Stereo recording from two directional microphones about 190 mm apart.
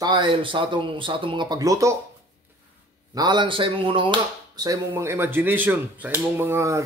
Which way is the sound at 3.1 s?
25° right (ahead or behind).